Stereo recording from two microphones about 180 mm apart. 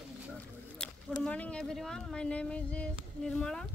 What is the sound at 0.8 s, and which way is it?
Speech, 5° left (ahead or behind).